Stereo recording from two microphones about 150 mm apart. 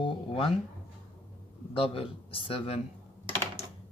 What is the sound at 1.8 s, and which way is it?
Speech, 40° left (ahead or behind).